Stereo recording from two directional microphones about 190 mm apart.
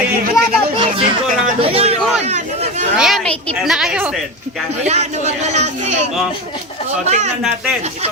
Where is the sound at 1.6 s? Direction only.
30° right (ahead or behind).